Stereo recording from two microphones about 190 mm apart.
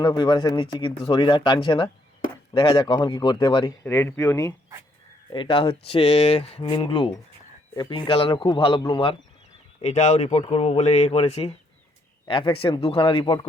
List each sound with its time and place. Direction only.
0.0 s speech: 25° left (ahead or behind)
3.8 s speech: 15° left (ahead or behind)
5.3 s speech: 25° left (ahead or behind)